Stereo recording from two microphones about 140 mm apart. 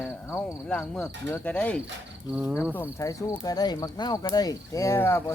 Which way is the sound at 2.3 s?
5° right (ahead or behind).